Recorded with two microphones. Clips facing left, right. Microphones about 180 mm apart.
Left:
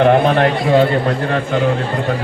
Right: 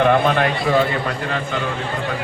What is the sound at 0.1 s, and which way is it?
Speech, 30° left (ahead or behind).